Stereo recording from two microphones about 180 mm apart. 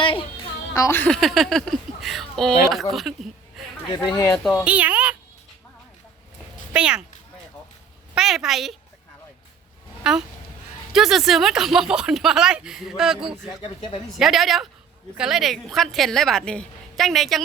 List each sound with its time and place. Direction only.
0.0 s music: 30° left (ahead or behind)
0.7 s speech: 15° left (ahead or behind); by 3.2 s centre (ahead or behind)
3.9 s speech: 25° left (ahead or behind)
4.6 s speech: 10° right (ahead or behind)
6.7 s speech: 5° right (ahead or behind)
8.1 s speech: 5° right (ahead or behind)
10.0 s speech: 5° right (ahead or behind)
13.5 s speech: 25° left (ahead or behind)
14.2 s speech: centre (ahead or behind)